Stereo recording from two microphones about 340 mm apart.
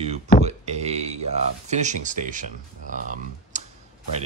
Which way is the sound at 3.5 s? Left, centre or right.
Right.